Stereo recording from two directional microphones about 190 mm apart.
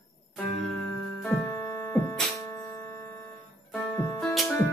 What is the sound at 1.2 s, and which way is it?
Music, 15° left (ahead or behind).